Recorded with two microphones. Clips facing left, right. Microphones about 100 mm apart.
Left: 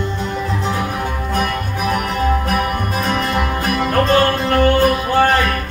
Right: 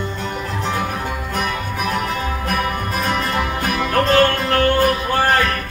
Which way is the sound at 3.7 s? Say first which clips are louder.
Even; 15° left (ahead or behind).